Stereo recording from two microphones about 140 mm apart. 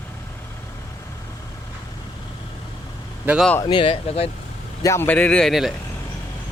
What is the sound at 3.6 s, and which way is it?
Speech, 35° left (ahead or behind).